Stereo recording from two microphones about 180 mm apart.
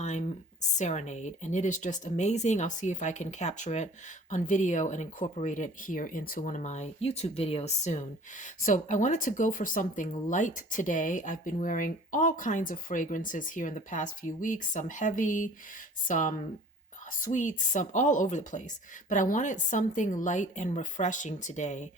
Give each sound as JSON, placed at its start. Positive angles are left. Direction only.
{"t": 0.0, "sound": "speech", "side_deg": 40}